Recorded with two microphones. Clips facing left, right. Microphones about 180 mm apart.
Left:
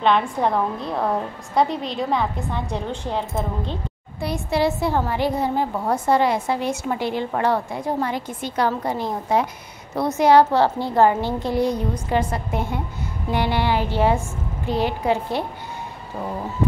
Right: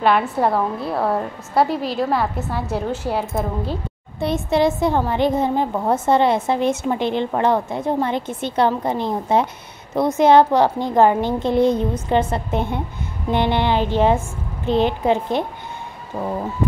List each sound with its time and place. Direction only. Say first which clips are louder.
0.0 s a woman's voice: right 2 dB; 5° right (ahead or behind)
4.2 s a woman's voice: right 4 dB; 20° right (ahead or behind)